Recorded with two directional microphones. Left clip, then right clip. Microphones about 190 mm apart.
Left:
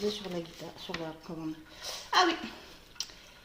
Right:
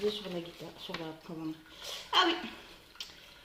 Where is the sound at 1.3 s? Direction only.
45° left (ahead or behind).